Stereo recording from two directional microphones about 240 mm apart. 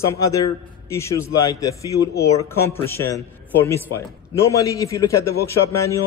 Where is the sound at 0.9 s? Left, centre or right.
Centre.